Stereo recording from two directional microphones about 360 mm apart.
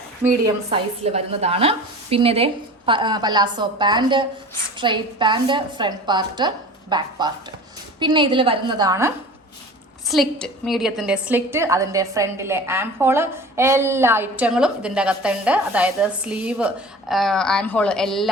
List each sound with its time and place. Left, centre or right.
0.3 s a woman's voice: centre